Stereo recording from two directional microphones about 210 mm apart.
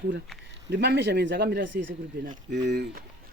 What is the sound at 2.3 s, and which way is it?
Speech, 45° right (ahead or behind).